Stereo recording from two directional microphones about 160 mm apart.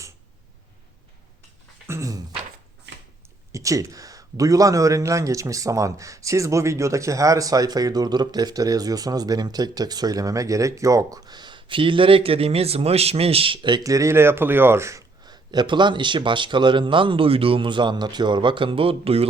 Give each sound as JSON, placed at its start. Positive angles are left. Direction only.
{"t": 1.9, "sound": "speech", "side_deg": -20}
{"t": 3.5, "sound": "speech", "side_deg": -20}